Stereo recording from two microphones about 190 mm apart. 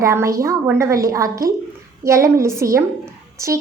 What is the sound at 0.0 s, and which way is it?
A woman's voice, 15° right (ahead or behind).